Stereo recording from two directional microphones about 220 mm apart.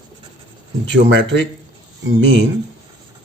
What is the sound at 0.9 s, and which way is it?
Speech, 55° right (ahead or behind).